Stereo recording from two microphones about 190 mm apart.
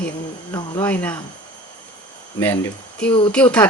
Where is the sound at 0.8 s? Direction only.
10° left (ahead or behind).